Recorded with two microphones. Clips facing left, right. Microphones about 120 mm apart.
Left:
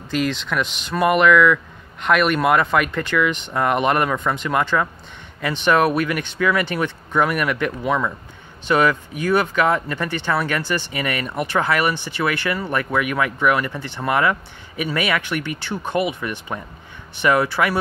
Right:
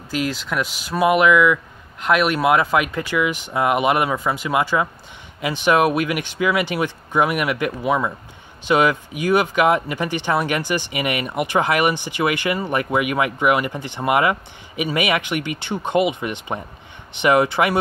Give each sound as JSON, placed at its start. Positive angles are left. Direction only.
{"t": 0.1, "sound": "speech", "side_deg": -5}